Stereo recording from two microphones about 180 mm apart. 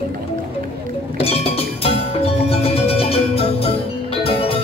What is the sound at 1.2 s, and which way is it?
Music, 35° left (ahead or behind).